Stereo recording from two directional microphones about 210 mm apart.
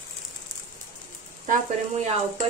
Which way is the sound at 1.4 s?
35° right (ahead or behind).